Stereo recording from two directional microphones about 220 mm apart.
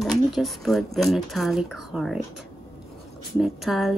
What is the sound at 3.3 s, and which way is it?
Speech, centre (ahead or behind).